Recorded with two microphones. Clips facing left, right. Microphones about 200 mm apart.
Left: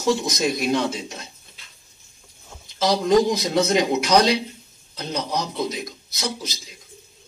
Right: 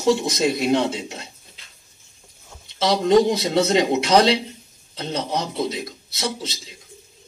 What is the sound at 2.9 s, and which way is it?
A man's voice, 25° right (ahead or behind).